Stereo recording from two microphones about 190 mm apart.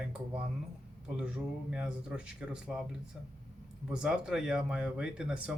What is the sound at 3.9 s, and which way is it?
Speech, 5° right (ahead or behind).